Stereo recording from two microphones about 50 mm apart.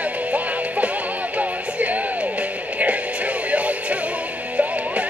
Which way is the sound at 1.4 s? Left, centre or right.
Right.